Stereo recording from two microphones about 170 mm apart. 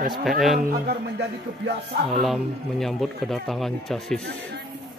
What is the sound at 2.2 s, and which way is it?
A man's voice, centre (ahead or behind).